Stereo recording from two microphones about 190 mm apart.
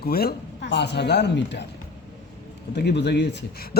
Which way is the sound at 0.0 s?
55° left (ahead or behind).